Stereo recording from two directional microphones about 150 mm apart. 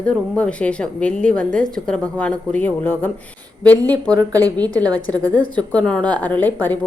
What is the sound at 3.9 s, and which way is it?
Speech, 25° right (ahead or behind).